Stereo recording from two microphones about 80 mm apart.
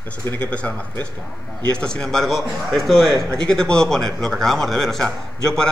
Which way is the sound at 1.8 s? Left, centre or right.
Centre.